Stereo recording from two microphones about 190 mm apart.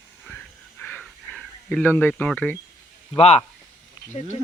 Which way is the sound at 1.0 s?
5° left (ahead or behind).